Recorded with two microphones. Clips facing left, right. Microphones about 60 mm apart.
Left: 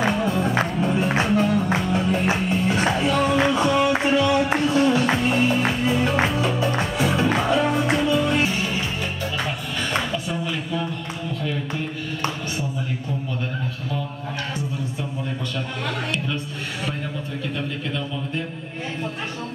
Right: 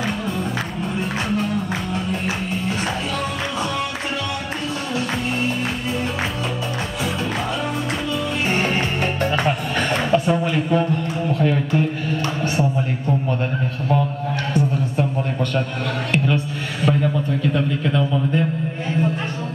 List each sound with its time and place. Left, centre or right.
0.1 s music: centre
3.0 s music: centre
8.5 s music: right